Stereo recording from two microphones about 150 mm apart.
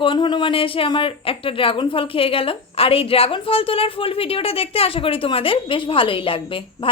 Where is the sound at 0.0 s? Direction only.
35° left (ahead or behind).